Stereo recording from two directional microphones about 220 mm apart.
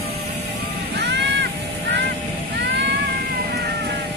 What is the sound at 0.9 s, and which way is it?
Vehicle, 50° right (ahead or behind).